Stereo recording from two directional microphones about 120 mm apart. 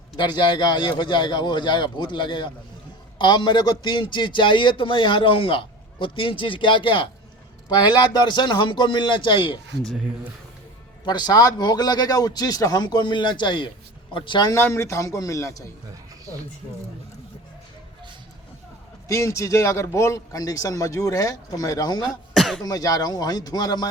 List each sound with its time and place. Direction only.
0.2 s a man's voice: 40° left (ahead or behind)
11.0 s a man's voice: 35° left (ahead or behind)
14.5 s a man's voice: 20° left (ahead or behind)
15.9 s a sound: 30° right (ahead or behind)
19.0 s a man's voice: 25° left (ahead or behind)
22.4 s cough: centre (ahead or behind)
22.6 s a man's voice: 30° left (ahead or behind)